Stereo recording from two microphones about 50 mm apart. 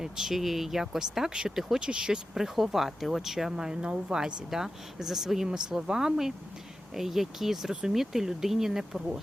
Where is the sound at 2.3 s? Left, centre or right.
Centre.